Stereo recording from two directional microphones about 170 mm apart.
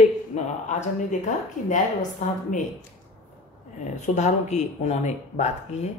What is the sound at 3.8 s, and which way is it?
A woman's voice, 45° left (ahead or behind).